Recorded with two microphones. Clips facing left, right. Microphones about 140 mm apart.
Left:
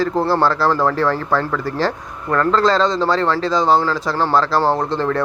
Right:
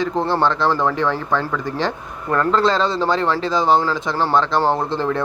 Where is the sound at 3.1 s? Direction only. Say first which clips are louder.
Left 2 dB; 25° right (ahead or behind).